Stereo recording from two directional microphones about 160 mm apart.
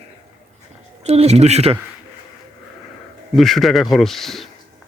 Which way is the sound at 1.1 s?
40° right (ahead or behind).